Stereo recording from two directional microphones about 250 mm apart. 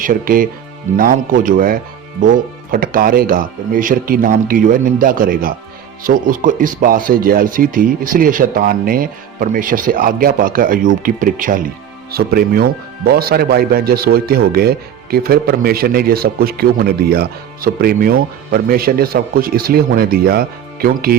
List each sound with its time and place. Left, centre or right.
0.0 s speech: right